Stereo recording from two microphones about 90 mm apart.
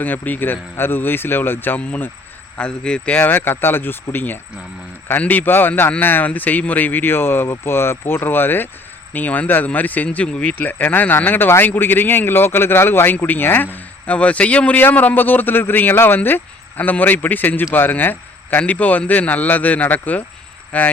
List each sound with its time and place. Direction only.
0.0 s a man's voice: 20° left (ahead or behind)